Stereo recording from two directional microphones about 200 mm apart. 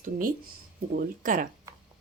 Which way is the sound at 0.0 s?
45° right (ahead or behind).